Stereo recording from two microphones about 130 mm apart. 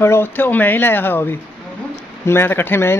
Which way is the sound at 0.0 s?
20° left (ahead or behind).